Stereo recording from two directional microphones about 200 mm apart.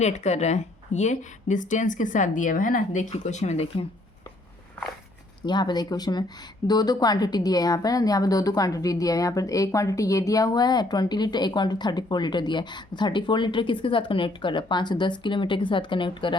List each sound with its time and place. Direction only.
0.0 s speech: 35° left (ahead or behind)
5.5 s a woman's voice: 20° left (ahead or behind)